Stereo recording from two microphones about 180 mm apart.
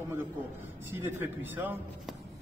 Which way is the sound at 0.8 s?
15° right (ahead or behind).